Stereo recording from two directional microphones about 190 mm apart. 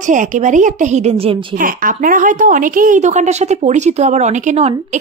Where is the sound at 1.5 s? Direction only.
45° right (ahead or behind).